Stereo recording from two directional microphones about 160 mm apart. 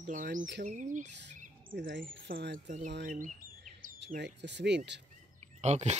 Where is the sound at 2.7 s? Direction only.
45° right (ahead or behind); by 5.0 s 90° right.